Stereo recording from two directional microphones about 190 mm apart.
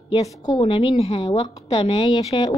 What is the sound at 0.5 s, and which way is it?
A woman's voice, 30° left (ahead or behind).